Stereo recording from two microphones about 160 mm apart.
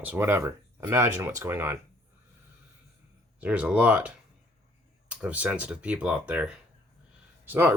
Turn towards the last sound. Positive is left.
turn(degrees=-10)  # may be behind; listen again after turning